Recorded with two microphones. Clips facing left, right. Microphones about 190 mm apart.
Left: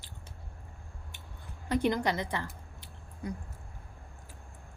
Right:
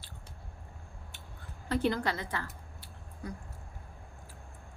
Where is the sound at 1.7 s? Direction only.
15° left (ahead or behind).